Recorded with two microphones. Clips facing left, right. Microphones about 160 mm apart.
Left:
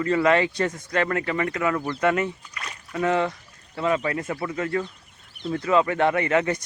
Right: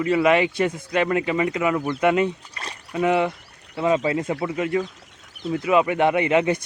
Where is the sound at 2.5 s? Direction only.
30° right (ahead or behind).